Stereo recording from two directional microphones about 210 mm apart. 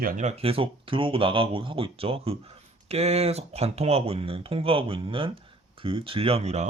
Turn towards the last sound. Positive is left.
turn(degrees=-30)  # may be behind; listen again after turning